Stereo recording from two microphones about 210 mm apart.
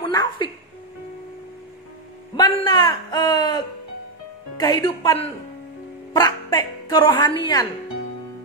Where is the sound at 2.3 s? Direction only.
20° left (ahead or behind).